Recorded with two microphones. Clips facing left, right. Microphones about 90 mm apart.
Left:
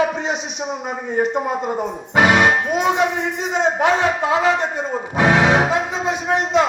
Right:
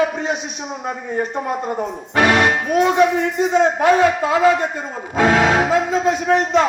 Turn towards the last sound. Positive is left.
turn(degrees=20)  # may be behind; listen again after turning